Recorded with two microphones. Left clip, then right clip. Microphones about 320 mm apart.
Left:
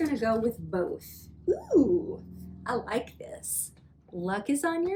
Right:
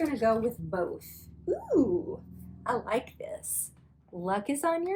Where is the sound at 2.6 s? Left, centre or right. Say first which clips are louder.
Right 1 dB; centre.